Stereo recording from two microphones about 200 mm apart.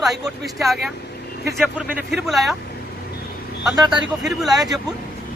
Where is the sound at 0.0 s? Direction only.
Centre (ahead or behind).